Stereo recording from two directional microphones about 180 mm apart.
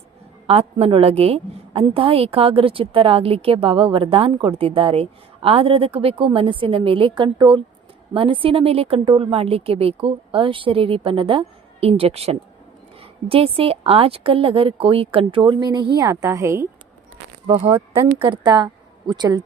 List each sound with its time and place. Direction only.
0.4 s a woman's voice: 35° right (ahead or behind)